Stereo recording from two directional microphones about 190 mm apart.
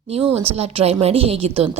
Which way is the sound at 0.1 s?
30° right (ahead or behind).